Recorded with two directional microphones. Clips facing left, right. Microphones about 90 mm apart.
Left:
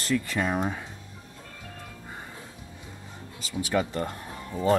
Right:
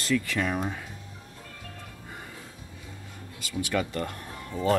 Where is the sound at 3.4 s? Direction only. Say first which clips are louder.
Left 2 dB; 25° left (ahead or behind).